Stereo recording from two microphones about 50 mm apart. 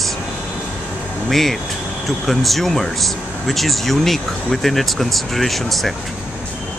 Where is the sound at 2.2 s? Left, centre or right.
Centre.